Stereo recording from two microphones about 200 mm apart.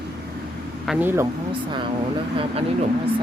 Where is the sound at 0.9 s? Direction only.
10° right (ahead or behind).